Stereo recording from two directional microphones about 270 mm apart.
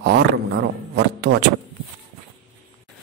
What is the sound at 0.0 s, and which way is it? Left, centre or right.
Speech, right.